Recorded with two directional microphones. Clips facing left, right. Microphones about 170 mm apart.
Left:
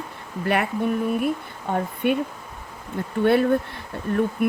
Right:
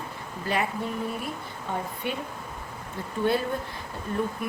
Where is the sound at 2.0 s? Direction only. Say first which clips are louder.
Left 12 dB; 60° left (ahead or behind).